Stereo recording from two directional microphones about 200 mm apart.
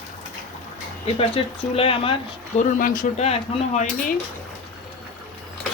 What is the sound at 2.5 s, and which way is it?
Speech, 45° left (ahead or behind).